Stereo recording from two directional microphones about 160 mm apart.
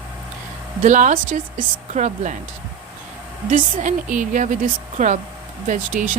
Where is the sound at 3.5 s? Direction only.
50° right (ahead or behind).